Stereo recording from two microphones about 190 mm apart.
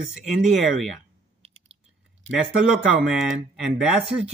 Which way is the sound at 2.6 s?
5° right (ahead or behind).